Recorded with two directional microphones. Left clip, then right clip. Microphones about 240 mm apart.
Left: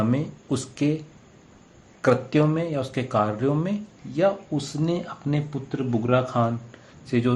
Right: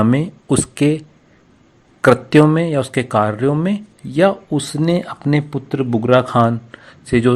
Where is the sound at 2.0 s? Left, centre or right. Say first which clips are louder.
Right 10 dB; right.